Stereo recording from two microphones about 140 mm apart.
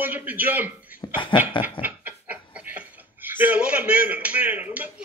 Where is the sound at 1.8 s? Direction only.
10° right (ahead or behind).